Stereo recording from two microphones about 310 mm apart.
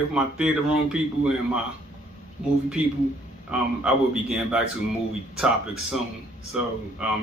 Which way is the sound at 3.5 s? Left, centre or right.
Centre.